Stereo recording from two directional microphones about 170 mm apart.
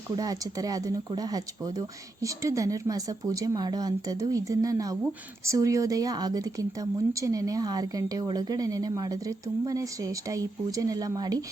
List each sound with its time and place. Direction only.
0.2 s a woman's voice: 20° right (ahead or behind)